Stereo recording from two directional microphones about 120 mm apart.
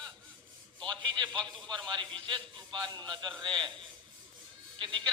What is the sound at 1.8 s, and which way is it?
Speech, 40° right (ahead or behind).